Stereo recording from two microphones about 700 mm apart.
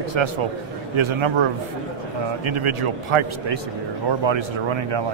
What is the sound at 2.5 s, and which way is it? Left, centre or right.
A man's voice, right.